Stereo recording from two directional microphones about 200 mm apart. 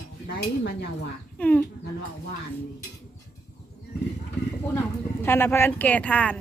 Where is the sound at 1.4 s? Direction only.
5° left (ahead or behind).